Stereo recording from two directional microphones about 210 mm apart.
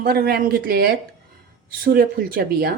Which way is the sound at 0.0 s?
45° right (ahead or behind).